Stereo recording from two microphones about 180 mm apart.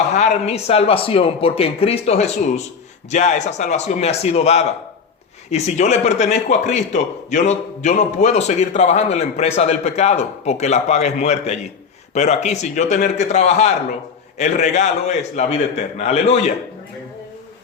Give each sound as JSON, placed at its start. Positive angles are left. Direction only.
{"t": 0.1, "sound": "a man's voice", "side_deg": 40}